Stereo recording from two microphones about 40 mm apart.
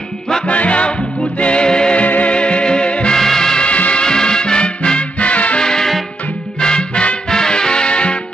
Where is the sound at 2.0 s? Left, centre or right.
Left.